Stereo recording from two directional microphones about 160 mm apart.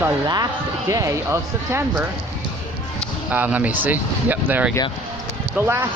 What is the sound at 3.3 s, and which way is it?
Speech, 10° right (ahead or behind).